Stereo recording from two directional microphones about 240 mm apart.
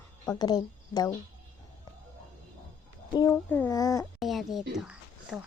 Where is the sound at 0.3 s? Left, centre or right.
Centre.